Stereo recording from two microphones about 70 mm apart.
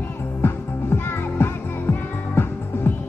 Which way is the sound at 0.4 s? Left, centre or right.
Left.